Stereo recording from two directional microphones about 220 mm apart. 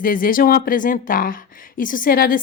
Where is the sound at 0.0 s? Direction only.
40° left (ahead or behind).